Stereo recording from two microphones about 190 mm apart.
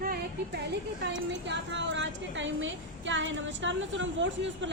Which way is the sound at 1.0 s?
65° right (ahead or behind).